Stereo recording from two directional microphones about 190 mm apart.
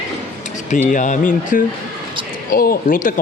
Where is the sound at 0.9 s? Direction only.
40° left (ahead or behind).